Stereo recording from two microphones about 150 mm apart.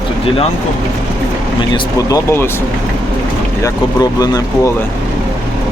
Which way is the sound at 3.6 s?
25° left (ahead or behind).